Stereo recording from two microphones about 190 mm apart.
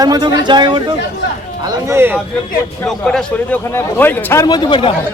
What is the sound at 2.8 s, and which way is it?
Speech, 5° left (ahead or behind).